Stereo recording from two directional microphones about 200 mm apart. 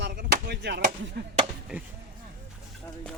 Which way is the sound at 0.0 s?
55° right (ahead or behind).